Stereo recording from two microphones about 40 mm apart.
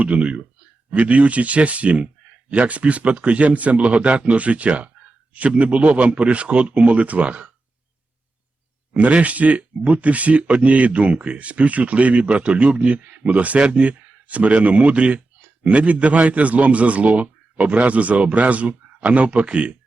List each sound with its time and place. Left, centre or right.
0.0 s speech: right
8.9 s speech: right